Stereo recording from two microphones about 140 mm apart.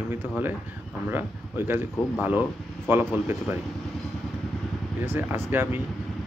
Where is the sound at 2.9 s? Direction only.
15° right (ahead or behind).